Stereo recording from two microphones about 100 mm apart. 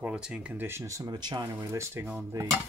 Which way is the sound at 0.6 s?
30° right (ahead or behind).